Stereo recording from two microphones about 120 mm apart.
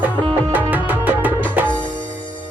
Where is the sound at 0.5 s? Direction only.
15° right (ahead or behind).